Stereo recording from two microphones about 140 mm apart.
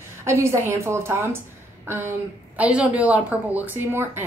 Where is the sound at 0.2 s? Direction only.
20° right (ahead or behind).